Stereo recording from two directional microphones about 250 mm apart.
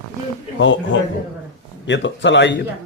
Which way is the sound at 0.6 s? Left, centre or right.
Left.